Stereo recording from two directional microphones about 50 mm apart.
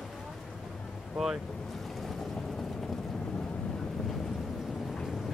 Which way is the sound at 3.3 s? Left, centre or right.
Centre.